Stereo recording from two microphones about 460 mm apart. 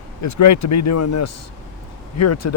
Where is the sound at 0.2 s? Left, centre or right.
Left.